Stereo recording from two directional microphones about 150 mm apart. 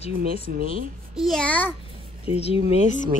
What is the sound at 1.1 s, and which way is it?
Speech, centre (ahead or behind).